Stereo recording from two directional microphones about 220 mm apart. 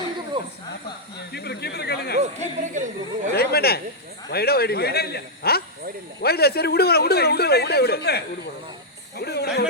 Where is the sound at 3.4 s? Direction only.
45° left (ahead or behind).